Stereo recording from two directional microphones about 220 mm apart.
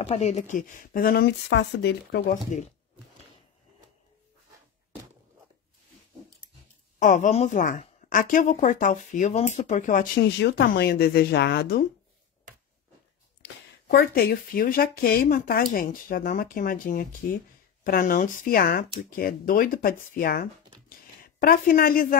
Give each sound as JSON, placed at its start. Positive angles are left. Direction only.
{"t": 0.0, "sound": "a woman's voice", "side_deg": 30}
{"t": 7.0, "sound": "a woman's voice", "side_deg": 35}
{"t": 13.4, "sound": "a woman's voice", "side_deg": 45}
{"t": 20.9, "sound": "a sound", "side_deg": 40}